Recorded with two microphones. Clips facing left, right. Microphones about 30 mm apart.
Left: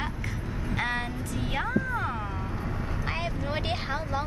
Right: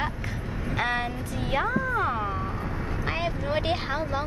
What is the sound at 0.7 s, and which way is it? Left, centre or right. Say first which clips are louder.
Vehicle: right 3 dB; centre.